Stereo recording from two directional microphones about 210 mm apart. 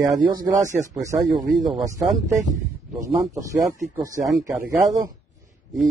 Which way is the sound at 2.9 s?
15° right (ahead or behind).